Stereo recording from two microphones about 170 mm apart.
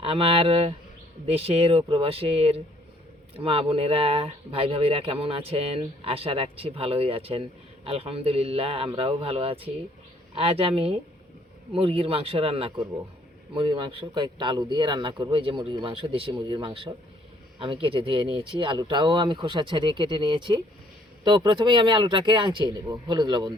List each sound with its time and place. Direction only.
0.0 s speech: 35° right (ahead or behind)